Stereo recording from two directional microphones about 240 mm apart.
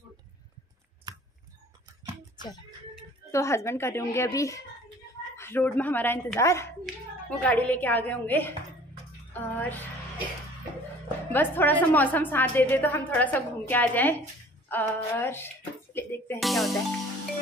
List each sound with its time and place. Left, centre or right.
1.1 s a sound: centre
3.3 s a woman's voice: centre
9.3 s music: centre
11.3 s a woman's voice: centre
15.9 s music: centre